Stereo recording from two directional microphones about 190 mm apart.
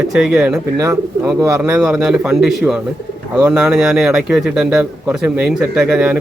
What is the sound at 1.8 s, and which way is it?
A man's voice, 5° right (ahead or behind).